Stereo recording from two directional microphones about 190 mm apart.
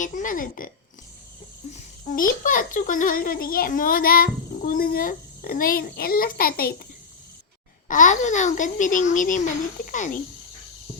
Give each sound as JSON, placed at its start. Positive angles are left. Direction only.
{"t": 0.0, "sound": "a child's voice", "side_deg": 45}
{"t": 1.7, "sound": "a child's voice", "side_deg": 45}
{"t": 7.9, "sound": "a child's voice", "side_deg": 40}